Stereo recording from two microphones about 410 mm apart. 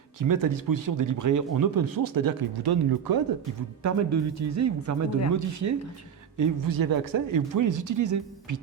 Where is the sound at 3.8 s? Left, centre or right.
Right.